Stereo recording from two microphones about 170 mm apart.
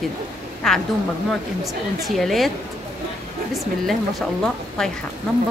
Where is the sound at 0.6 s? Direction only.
Centre (ahead or behind).